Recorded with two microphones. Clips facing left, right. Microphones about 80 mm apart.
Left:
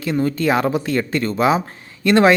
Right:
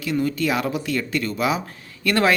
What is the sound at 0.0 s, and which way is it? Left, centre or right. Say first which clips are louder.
A man's voice: left 3 dB; left.